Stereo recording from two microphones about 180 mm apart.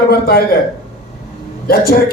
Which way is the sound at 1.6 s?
55° left (ahead or behind).